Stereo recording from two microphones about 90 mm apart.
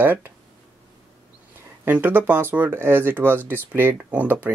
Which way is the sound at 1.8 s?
20° right (ahead or behind).